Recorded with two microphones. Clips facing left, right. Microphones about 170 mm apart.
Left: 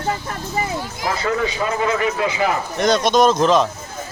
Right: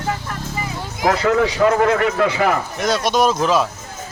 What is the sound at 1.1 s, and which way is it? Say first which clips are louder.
A man's voice: right 5 dB; 75° right (ahead or behind).